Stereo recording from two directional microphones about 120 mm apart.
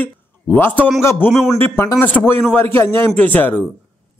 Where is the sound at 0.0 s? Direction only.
15° left (ahead or behind).